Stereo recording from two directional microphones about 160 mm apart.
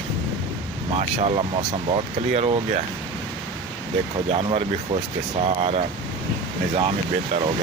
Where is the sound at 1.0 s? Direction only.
40° right (ahead or behind).